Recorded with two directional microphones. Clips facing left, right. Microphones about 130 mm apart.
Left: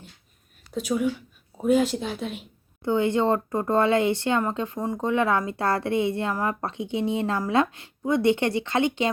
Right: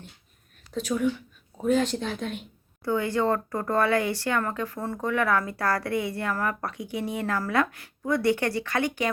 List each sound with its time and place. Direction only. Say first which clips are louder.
0.7 s speech: left 1 dB; 10° left (ahead or behind)
2.8 s speech: left 3 dB; 20° left (ahead or behind)